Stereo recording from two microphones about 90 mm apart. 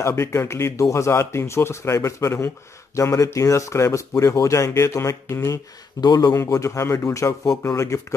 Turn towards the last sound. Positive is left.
turn(degrees=35)  # may be behind; listen again after turning